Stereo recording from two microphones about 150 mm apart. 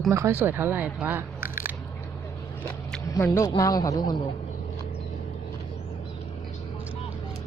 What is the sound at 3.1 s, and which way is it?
A man's voice, 20° left (ahead or behind).